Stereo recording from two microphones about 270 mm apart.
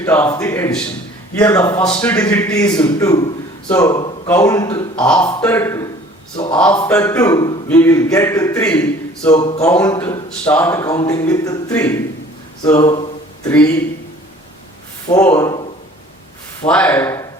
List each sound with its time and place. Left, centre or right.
0.0 s speech: centre
6.3 s a sound: centre
6.6 s speech: centre
9.3 s speech: centre
9.6 s speech: centre
12.6 s a sound: centre
13.5 s speech: centre
15.1 s speech: centre
16.6 s speech: centre